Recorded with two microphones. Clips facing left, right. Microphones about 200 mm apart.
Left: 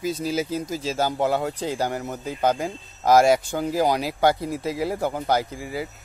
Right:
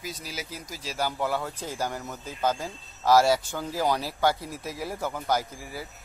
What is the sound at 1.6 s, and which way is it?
Speech, 65° left (ahead or behind).